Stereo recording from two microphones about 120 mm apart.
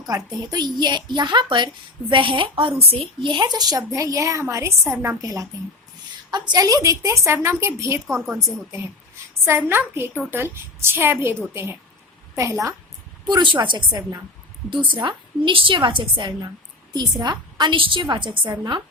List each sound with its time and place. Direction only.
0.0 s a woman's voice: 35° right (ahead or behind)
9.5 s a woman's voice: 20° right (ahead or behind)
13.2 s a woman's voice: 40° right (ahead or behind)